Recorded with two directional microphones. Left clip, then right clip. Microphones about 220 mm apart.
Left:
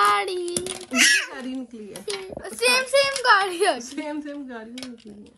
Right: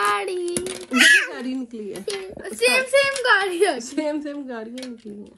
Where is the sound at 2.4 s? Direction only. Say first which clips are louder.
Right 2 dB; 30° left (ahead or behind).